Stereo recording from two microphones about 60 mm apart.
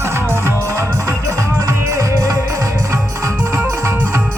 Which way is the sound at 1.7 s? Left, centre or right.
Right.